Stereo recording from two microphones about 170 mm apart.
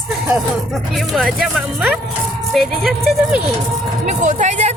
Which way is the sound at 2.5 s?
Centre (ahead or behind).